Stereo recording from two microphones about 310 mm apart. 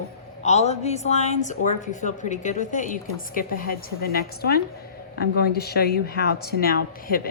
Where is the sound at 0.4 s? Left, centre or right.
Left.